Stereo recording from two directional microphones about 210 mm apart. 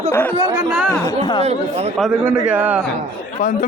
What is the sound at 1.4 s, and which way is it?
Speech, 30° right (ahead or behind).